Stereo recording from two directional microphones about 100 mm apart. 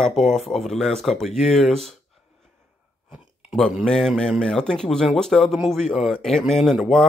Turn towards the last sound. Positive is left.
turn(degrees=0)  # may be behind; listen again after turning